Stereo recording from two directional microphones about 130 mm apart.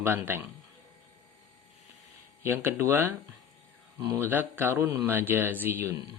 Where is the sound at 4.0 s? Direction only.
25° right (ahead or behind).